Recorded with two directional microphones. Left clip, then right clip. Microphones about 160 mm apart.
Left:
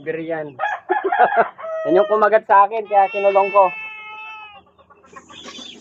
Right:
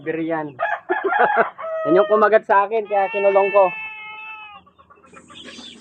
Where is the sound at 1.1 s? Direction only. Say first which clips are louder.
Left 2 dB; 20° right (ahead or behind).